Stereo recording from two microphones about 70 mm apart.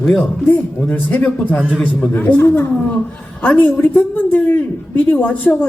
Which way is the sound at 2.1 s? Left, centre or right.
Left.